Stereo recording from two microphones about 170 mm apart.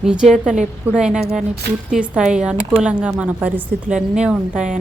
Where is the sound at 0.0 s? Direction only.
5° right (ahead or behind).